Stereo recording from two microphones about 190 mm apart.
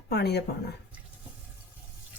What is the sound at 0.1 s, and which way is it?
Speech, 60° left (ahead or behind).